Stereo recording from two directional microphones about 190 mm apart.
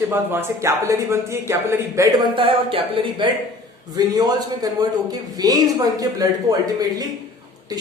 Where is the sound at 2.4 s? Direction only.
30° right (ahead or behind).